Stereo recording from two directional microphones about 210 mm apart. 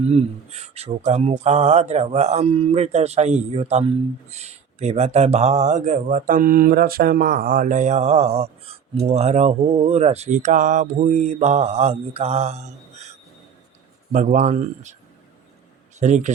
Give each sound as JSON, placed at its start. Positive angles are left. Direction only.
{"t": 0.1, "sound": "speech", "side_deg": -30}
{"t": 14.1, "sound": "speech", "side_deg": -35}
{"t": 16.0, "sound": "speech", "side_deg": -35}